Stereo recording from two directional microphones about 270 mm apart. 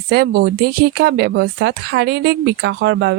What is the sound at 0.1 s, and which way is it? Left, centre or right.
Speech, right.